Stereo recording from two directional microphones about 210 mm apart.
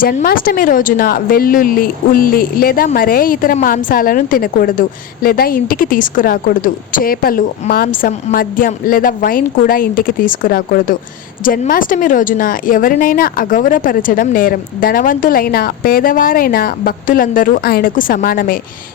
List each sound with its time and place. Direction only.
0.0 s speech: 45° left (ahead or behind)